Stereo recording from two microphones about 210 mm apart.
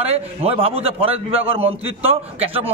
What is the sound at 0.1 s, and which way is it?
A man's voice, 30° right (ahead or behind).